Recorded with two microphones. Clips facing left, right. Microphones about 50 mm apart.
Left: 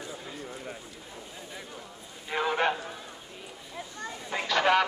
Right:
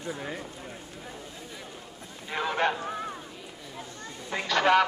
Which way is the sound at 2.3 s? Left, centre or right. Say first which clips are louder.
Even; centre.